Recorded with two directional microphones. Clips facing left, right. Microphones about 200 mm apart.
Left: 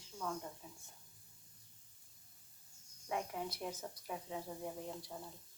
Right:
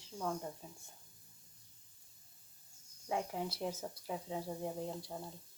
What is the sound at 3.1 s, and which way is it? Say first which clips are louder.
Speech: right 3 dB; 30° right (ahead or behind).